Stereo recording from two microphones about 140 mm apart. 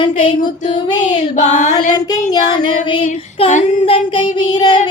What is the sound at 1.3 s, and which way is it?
Speech, 60° left (ahead or behind).